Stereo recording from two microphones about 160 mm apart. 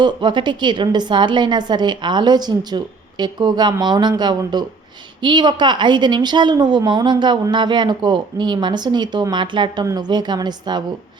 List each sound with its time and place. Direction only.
0.0 s a woman's voice: 30° right (ahead or behind)